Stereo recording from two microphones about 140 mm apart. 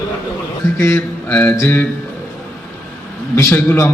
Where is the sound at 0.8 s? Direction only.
15° left (ahead or behind).